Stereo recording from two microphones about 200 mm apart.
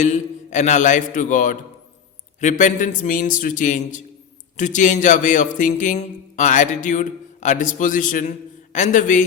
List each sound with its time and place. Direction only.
0.0 s speech: 35° left (ahead or behind)